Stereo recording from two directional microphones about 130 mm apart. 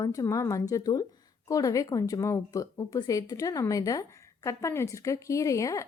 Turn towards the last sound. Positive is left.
turn(degrees=25)  # may be behind; listen again after turning